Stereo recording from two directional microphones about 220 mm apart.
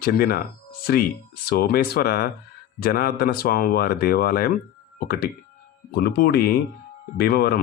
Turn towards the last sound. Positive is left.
turn(degrees=45)  # may be behind; listen again after turning